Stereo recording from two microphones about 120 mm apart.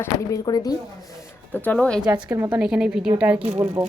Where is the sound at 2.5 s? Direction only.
5° right (ahead or behind).